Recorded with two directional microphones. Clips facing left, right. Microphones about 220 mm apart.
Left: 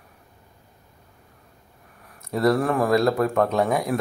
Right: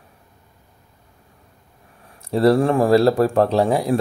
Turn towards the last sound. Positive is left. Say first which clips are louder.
# right 4 dB
turn(degrees=-30)  # may be behind; listen again after turning